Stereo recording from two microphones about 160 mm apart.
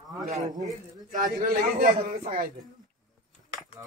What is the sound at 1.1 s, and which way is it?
A man's voice, 60° right (ahead or behind).